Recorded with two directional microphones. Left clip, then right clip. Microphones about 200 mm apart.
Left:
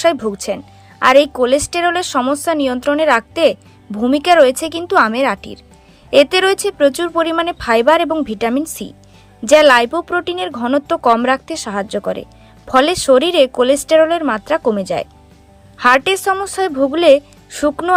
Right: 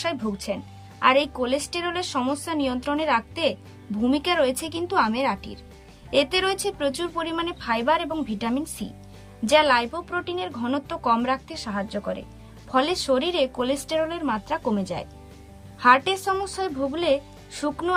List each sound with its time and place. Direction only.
0.3 s speech: 20° left (ahead or behind)